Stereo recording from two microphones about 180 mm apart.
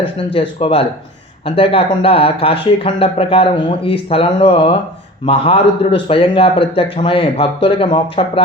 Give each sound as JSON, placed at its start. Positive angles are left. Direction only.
{"t": 0.6, "sound": "a man's voice", "side_deg": 30}